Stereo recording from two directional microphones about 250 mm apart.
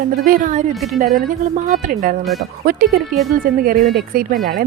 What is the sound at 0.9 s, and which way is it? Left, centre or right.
A woman's voice, right.